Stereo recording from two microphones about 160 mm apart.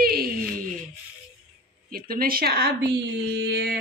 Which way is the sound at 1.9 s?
65° right (ahead or behind).